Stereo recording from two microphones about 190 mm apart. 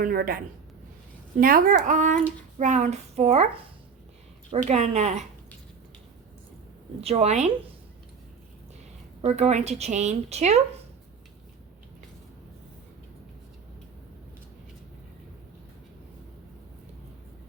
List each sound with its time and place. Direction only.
0.0 s speech: 50° right (ahead or behind)
4.7 s speech: 35° right (ahead or behind)
7.0 s speech: 35° right (ahead or behind)
9.2 s speech: 35° right (ahead or behind)